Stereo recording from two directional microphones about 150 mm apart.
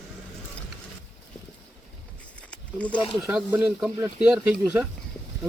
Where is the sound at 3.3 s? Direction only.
5° right (ahead or behind).